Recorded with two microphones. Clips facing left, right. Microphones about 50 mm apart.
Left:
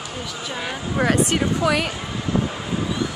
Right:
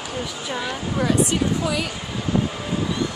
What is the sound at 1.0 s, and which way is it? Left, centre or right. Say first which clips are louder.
Speech: left 1 dB; left.